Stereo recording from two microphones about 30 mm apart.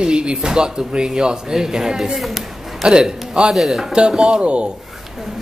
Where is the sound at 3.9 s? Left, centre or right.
Right.